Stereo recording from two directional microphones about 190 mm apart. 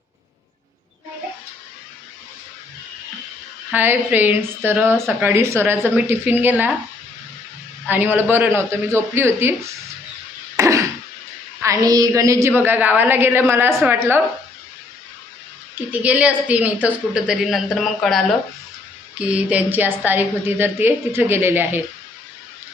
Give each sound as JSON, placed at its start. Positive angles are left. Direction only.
{"t": 3.7, "sound": "a woman's voice", "side_deg": -10}
{"t": 7.9, "sound": "a woman's voice", "side_deg": -10}
{"t": 10.6, "sound": "throat clearing", "side_deg": -15}
{"t": 11.6, "sound": "a woman's voice", "side_deg": -20}
{"t": 15.9, "sound": "a woman's voice", "side_deg": -5}
{"t": 19.2, "sound": "a woman's voice", "side_deg": -5}